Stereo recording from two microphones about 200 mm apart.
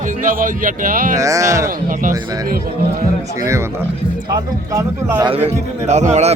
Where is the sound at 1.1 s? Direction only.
15° right (ahead or behind).